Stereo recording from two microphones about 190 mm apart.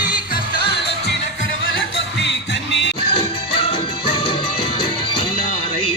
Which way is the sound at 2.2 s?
70° left (ahead or behind).